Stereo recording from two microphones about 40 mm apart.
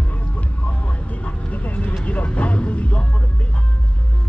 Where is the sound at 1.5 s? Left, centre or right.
Left.